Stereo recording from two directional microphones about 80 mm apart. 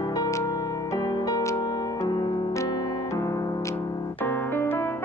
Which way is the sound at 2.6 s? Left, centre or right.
Left.